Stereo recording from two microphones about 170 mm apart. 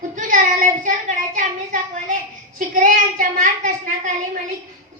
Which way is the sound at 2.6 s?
50° right (ahead or behind).